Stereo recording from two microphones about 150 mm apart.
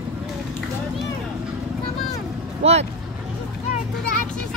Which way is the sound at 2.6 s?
45° right (ahead or behind).